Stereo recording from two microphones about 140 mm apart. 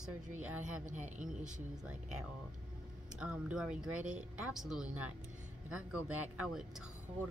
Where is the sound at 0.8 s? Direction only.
60° right (ahead or behind).